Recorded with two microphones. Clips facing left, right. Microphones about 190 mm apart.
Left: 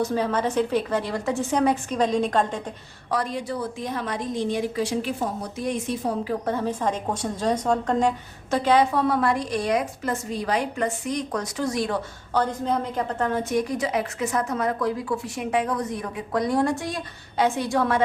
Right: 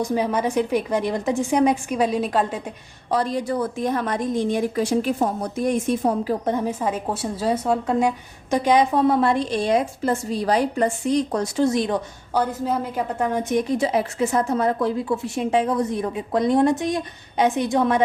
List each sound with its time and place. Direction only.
0.0 s a woman's voice: 15° right (ahead or behind)
3.1 s a woman's voice: 30° right (ahead or behind); by 6.3 s 50° right (ahead or behind)
6.4 s a woman's voice: 15° right (ahead or behind)
12.3 s a woman's voice: 10° right (ahead or behind)